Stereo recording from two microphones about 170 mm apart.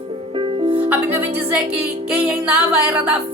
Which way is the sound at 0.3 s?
30° right (ahead or behind).